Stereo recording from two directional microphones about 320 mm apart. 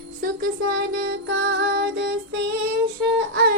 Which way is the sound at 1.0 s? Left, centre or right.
Right.